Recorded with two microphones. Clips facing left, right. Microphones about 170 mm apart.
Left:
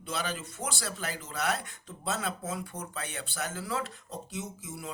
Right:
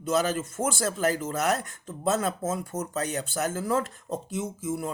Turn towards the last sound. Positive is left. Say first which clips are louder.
# right 10 dB
turn(degrees=-50)  # may be behind; listen again after turning